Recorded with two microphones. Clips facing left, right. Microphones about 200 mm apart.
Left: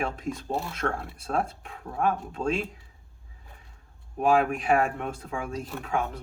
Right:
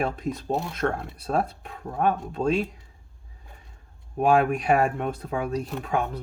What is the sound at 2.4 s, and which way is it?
Speech, 25° right (ahead or behind).